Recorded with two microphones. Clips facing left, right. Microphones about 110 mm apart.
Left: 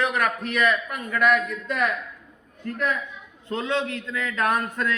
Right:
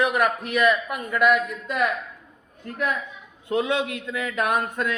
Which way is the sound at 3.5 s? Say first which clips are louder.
Right 2 dB; 15° right (ahead or behind).